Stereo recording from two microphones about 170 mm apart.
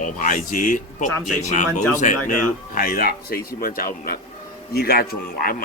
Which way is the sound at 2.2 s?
50° left (ahead or behind).